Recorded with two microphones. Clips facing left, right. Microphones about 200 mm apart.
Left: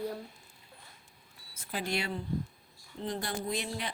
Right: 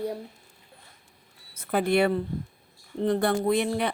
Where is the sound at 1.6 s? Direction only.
55° right (ahead or behind).